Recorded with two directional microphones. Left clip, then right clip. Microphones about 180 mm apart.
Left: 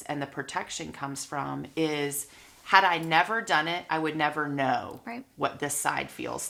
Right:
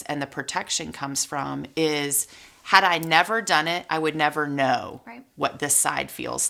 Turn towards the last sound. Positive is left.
turn(degrees=-25)  # may be behind; listen again after turning